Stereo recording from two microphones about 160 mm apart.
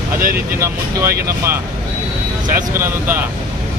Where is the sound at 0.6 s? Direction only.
20° right (ahead or behind).